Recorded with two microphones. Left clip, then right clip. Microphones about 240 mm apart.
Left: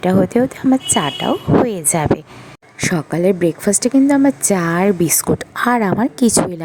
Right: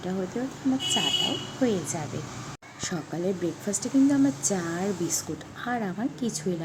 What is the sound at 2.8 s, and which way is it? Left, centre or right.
A woman's voice, left.